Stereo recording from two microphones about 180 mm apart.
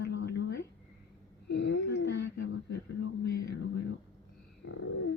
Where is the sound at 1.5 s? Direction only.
75° left (ahead or behind).